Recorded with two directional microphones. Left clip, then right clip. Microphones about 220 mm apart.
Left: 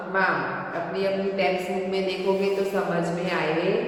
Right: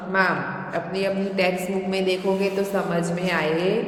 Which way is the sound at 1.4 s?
50° right (ahead or behind).